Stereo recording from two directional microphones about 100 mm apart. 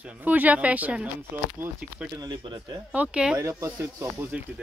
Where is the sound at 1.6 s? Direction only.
25° right (ahead or behind).